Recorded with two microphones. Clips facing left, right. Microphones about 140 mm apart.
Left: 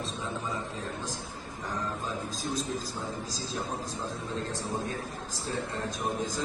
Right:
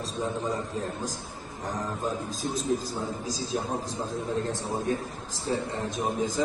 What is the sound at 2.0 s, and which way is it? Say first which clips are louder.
Speech: right 3 dB; 50° right (ahead or behind).